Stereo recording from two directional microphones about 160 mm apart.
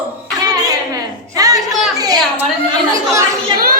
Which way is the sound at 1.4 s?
25° right (ahead or behind).